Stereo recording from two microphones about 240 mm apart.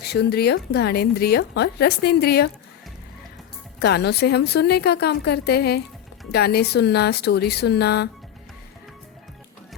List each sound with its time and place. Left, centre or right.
0.0 s speech: left
3.8 s speech: left